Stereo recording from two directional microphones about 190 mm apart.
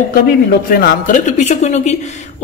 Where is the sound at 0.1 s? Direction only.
50° left (ahead or behind).